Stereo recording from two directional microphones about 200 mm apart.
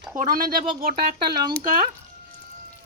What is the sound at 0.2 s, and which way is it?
Speech, 45° right (ahead or behind).